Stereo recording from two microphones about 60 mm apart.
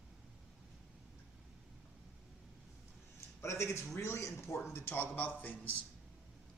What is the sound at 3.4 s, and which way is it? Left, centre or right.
A man's voice, left.